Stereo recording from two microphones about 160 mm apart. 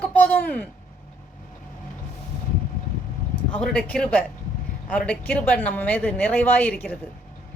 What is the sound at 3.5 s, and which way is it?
A woman's voice, 5° left (ahead or behind).